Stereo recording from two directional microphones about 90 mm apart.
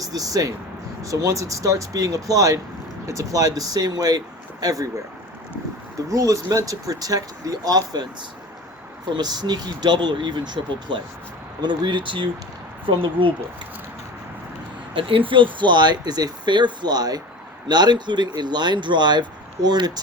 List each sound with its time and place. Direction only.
0.0 s speech: 40° right (ahead or behind)
6.1 s speech: 35° right (ahead or behind)
9.1 s speech: 50° right (ahead or behind); by 13.3 s 70° right (ahead or behind)
14.9 s speech: 70° right (ahead or behind); by 19.9 s 50° right (ahead or behind)